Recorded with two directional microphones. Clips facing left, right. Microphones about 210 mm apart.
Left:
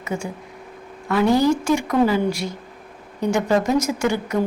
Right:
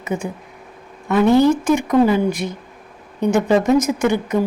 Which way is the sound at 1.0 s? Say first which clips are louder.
Right 4 dB; 20° right (ahead or behind).